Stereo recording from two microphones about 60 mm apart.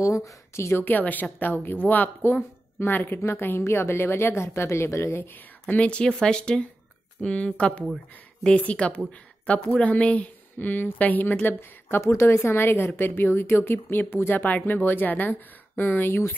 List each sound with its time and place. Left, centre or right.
0.0 s speech: left
0.8 s a woman's voice: left
5.3 s a woman's voice: left
12.0 s a woman's voice: left
16.1 s a woman's voice: left